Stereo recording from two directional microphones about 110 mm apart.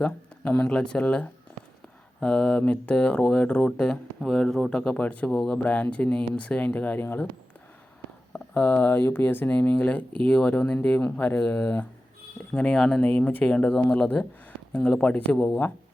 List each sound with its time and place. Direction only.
0.6 s speech: 5° left (ahead or behind)
8.3 s speech: 20° left (ahead or behind)